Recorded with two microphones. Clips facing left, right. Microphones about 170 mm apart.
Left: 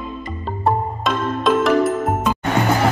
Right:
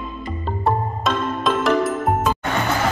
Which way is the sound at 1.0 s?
Centre (ahead or behind).